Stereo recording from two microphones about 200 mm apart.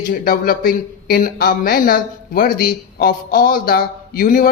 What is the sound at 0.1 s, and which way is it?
Speech, 45° left (ahead or behind).